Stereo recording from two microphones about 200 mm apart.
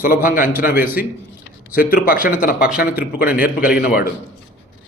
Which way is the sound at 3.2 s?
5° right (ahead or behind).